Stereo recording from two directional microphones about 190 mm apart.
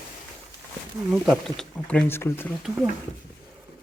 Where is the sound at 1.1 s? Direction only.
Centre (ahead or behind).